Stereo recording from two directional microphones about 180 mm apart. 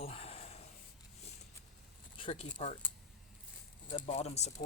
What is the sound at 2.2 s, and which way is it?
Speech, 35° left (ahead or behind).